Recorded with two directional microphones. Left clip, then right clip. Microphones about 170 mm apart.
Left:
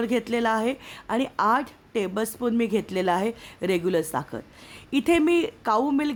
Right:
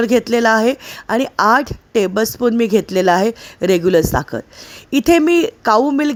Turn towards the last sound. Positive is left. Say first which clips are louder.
# right 10 dB
turn(degrees=-30)  # may be behind; listen again after turning